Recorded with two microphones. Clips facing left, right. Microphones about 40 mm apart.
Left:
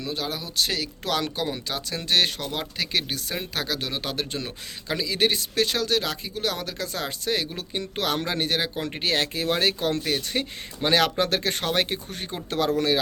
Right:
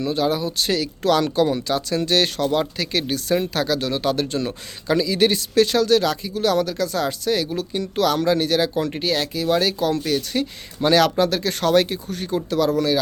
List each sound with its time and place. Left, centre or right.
0.0 s speech: centre
9.0 s speech: left; by 11.1 s centre
11.2 s speech: left
11.6 s speech: left
11.9 s speech: left